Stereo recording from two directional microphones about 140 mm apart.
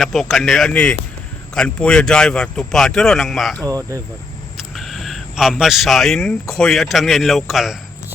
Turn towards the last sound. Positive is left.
turn(degrees=0)  # may be behind; listen again after turning